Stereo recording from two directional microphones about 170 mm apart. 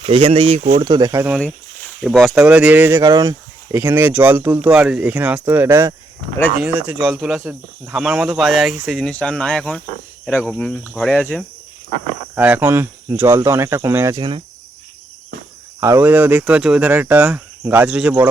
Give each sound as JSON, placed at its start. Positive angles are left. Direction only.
{"t": 0.0, "sound": "speech", "side_deg": -30}
{"t": 2.0, "sound": "speech", "side_deg": 0}
{"t": 3.0, "sound": "speech", "side_deg": -20}
{"t": 12.3, "sound": "speech", "side_deg": -10}
{"t": 14.2, "sound": "cricket", "side_deg": -30}
{"t": 15.8, "sound": "speech", "side_deg": -15}